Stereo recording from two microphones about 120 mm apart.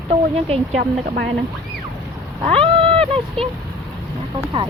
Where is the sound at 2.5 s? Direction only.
50° right (ahead or behind).